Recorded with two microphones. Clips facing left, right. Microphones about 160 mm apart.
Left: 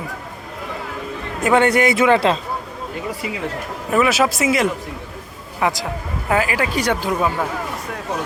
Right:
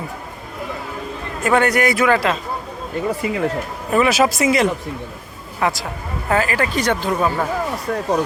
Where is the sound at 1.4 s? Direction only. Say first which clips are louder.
Left 1 dB; 20° left (ahead or behind).